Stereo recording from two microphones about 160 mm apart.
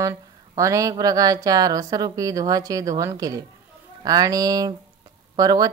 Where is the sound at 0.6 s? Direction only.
20° right (ahead or behind).